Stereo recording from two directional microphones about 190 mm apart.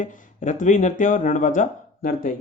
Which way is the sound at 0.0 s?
45° left (ahead or behind).